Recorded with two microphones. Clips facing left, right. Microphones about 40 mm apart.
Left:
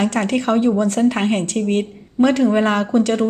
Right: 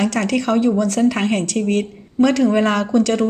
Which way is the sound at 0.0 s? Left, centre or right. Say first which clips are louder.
Even; left.